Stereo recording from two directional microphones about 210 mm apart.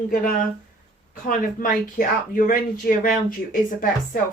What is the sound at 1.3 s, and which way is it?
Speech, 40° left (ahead or behind).